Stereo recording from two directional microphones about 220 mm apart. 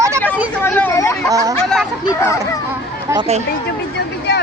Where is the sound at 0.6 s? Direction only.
10° left (ahead or behind).